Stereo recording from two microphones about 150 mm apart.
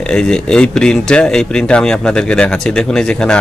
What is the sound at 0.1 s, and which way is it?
A man's voice, 5° left (ahead or behind).